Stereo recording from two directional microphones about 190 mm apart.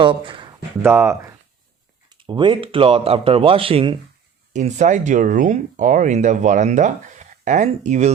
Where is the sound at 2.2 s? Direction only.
25° right (ahead or behind).